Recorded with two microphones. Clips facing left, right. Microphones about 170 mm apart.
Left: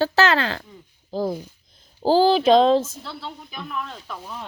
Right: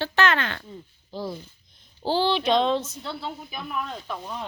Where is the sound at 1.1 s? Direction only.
45° left (ahead or behind).